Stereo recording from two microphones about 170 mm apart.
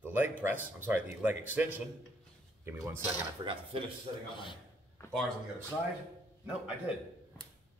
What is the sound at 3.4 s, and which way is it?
Speech, 30° right (ahead or behind).